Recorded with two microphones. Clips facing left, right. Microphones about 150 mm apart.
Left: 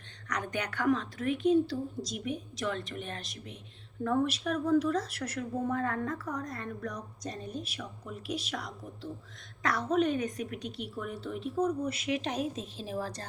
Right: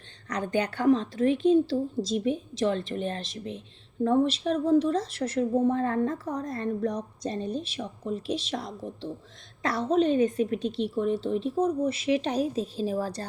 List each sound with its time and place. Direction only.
0.3 s a woman's voice: 30° right (ahead or behind)